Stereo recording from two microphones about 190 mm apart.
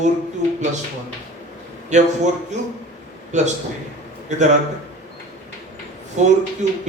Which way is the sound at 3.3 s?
40° right (ahead or behind).